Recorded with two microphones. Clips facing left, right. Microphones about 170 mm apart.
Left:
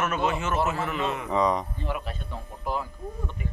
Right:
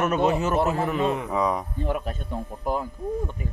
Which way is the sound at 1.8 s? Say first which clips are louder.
Right 5 dB; 45° right (ahead or behind).